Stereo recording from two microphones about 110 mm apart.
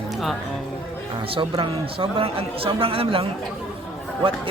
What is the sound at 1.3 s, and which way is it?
Speech, 50° right (ahead or behind).